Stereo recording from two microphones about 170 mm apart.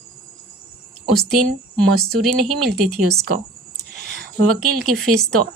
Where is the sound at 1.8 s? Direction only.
Centre (ahead or behind).